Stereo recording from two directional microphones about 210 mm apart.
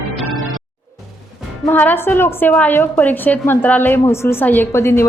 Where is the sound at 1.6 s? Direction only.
10° left (ahead or behind).